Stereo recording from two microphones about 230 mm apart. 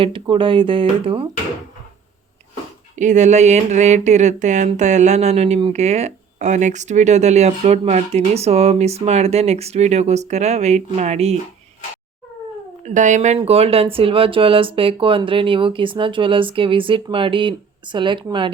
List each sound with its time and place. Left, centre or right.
0.0 s speech: right
2.9 s speech: right
12.8 s speech: right